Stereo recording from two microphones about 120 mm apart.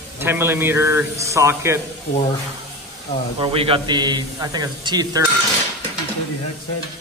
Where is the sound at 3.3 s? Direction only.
50° right (ahead or behind).